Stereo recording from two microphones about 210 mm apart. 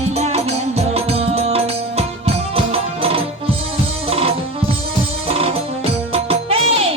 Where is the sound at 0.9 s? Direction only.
30° right (ahead or behind).